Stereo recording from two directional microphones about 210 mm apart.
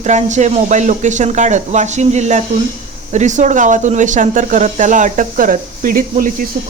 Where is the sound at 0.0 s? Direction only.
35° right (ahead or behind).